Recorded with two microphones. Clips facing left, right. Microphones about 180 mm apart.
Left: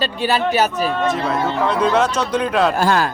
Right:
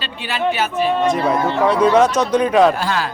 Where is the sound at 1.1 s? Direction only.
Centre (ahead or behind).